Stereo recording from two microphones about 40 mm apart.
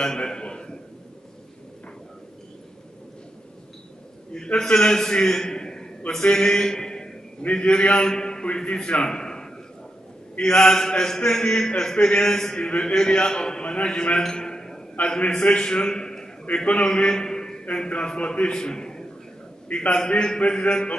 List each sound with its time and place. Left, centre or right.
0.0 s a man's voice: centre
4.6 s a man's voice: centre
14.2 s a sound: centre
15.0 s a man's voice: left
18.6 s a sound: centre
19.7 s a man's voice: left